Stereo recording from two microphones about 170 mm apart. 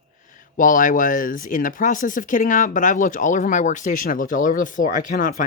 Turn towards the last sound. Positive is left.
turn(degrees=50)  # may be behind; listen again after turning